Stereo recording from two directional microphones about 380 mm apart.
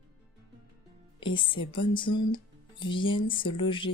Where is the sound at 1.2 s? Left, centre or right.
Centre.